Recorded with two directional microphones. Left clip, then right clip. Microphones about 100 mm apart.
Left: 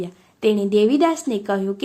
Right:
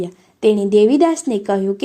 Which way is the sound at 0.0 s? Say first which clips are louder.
Right 5 dB; 25° right (ahead or behind).